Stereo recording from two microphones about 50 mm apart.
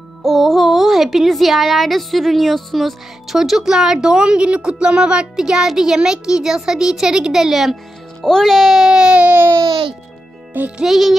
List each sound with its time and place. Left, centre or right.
0.2 s speech: centre
8.2 s speech: centre
9.2 s baby cry: right
10.8 s speech: centre